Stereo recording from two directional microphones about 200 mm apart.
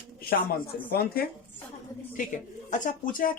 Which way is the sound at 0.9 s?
50° left (ahead or behind).